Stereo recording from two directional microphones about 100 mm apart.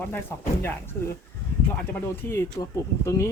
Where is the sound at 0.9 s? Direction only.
20° left (ahead or behind).